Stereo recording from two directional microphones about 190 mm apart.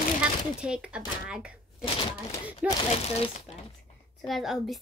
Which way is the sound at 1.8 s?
30° left (ahead or behind).